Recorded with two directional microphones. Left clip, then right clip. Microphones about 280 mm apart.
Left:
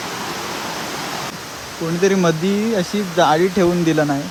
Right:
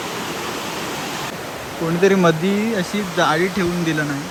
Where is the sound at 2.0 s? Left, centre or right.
Centre.